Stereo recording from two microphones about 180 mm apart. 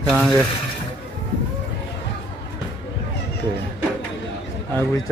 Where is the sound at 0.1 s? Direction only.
5° left (ahead or behind).